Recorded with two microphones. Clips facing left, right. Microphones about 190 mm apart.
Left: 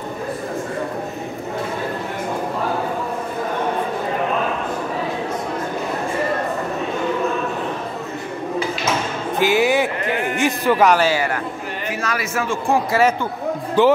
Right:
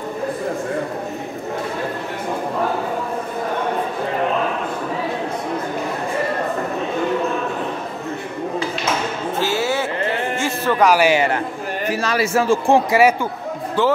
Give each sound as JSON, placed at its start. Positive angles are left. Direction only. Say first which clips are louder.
{"t": 9.4, "sound": "music", "louder": "left 5 dB", "side_deg": 15}
{"t": 11.0, "sound": "a man's voice", "louder": "right 3 dB", "side_deg": -20}
{"t": 12.9, "sound": "speech", "louder": "right 2 dB", "side_deg": -10}
{"t": 13.8, "sound": "a man's voice", "louder": "left 4 dB", "side_deg": 15}